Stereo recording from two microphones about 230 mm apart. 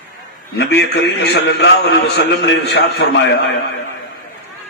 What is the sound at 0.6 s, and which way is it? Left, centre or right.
A man's voice, left.